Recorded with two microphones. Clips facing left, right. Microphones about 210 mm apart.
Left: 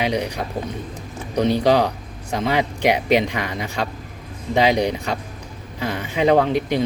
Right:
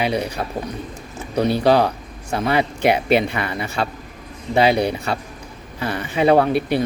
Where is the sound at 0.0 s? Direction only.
15° left (ahead or behind).